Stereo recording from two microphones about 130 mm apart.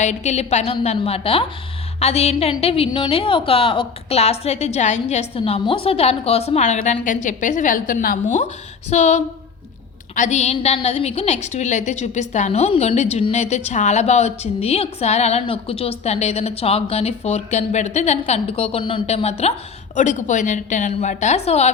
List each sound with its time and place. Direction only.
0.0 s a woman's voice: 65° left (ahead or behind); by 8.4 s 80° left
8.9 s a woman's voice: 65° left (ahead or behind); by 19.0 s 40° left (ahead or behind)
19.0 s a woman's voice: 55° left (ahead or behind)
20.0 s a woman's voice: 65° left (ahead or behind)